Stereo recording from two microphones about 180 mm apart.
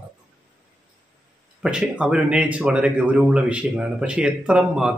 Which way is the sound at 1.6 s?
5° right (ahead or behind).